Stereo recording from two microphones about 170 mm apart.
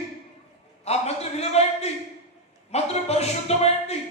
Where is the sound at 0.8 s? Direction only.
40° left (ahead or behind).